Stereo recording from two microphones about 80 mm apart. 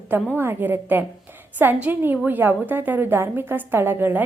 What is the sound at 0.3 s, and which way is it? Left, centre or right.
A woman's voice, right.